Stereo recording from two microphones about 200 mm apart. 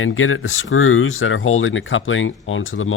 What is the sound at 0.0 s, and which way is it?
Speech, 90° left.